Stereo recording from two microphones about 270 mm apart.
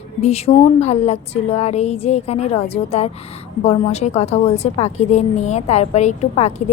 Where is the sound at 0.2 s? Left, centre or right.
Left.